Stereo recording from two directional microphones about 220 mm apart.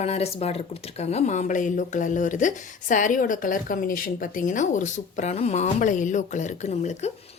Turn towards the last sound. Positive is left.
turn(degrees=30)  # may be behind; listen again after turning